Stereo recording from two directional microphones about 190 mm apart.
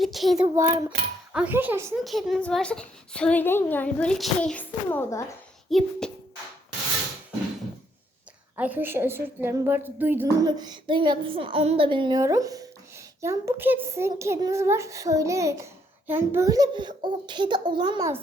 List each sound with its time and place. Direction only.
0.0 s a woman's voice: centre (ahead or behind)
0.3 s child singing: 20° right (ahead or behind)
1.3 s a child's voice: 5° right (ahead or behind)
2.0 s a woman's voice: centre (ahead or behind)
8.5 s a child's voice: 10° right (ahead or behind)